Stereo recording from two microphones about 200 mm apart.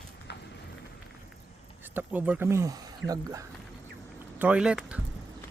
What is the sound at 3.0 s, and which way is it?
Speech, 65° right (ahead or behind).